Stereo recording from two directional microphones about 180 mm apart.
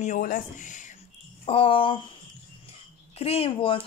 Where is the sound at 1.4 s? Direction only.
30° left (ahead or behind).